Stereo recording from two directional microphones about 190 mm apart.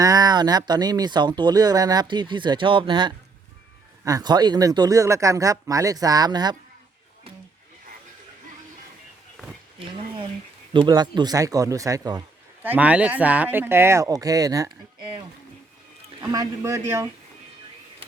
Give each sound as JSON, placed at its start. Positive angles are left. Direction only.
{"t": 0.0, "sound": "speech", "side_deg": -20}
{"t": 10.8, "sound": "speech", "side_deg": -20}
{"t": 12.6, "sound": "speech", "side_deg": -10}
{"t": 16.2, "sound": "speech", "side_deg": -20}